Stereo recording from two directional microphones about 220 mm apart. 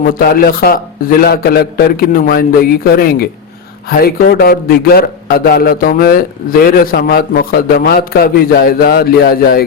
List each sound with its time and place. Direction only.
0.0 s a man's voice: 45° left (ahead or behind)